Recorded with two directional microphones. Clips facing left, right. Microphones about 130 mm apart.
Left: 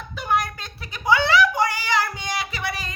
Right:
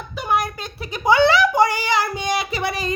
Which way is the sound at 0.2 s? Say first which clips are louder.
Right 2 dB; 5° right (ahead or behind).